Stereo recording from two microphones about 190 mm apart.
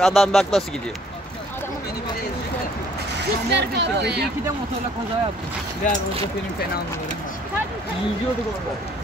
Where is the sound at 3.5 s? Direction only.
65° right (ahead or behind).